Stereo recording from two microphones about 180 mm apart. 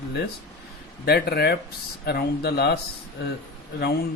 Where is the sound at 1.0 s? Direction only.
60° left (ahead or behind).